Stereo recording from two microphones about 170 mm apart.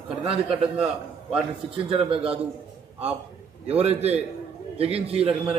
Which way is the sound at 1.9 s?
30° right (ahead or behind).